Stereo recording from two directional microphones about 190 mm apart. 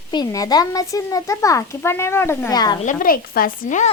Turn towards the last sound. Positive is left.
turn(degrees=45)  # may be behind; listen again after turning